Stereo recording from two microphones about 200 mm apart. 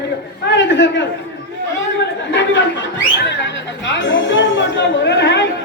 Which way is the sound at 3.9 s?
65° left (ahead or behind).